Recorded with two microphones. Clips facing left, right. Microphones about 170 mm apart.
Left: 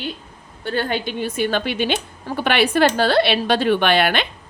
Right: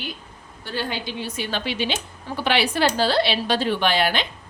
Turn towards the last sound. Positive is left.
turn(degrees=65)  # may be behind; listen again after turning